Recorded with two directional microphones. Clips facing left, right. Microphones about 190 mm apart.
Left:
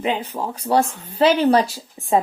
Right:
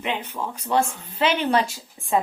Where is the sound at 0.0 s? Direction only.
35° left (ahead or behind).